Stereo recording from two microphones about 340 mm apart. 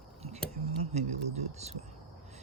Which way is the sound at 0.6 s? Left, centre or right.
Centre.